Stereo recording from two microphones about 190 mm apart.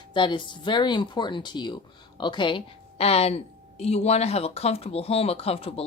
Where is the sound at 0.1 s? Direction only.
25° left (ahead or behind).